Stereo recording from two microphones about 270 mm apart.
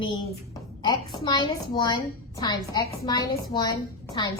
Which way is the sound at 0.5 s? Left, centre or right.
Centre.